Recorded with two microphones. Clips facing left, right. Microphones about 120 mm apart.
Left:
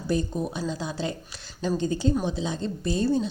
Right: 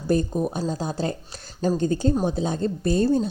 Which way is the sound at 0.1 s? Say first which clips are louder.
Right 5 dB; 50° right (ahead or behind).